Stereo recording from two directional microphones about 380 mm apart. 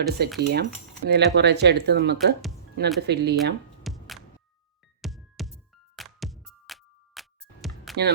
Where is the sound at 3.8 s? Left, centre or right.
Centre.